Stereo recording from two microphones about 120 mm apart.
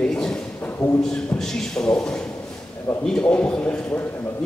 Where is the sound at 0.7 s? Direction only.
20° left (ahead or behind).